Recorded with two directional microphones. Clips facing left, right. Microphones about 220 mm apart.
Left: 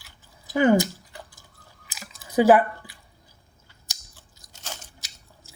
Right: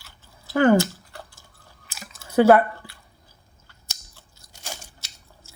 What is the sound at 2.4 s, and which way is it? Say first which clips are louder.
Speech: right 2 dB; 5° left (ahead or behind).